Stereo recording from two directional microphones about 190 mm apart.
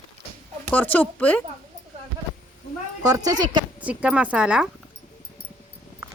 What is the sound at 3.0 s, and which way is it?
Speech, 20° right (ahead or behind).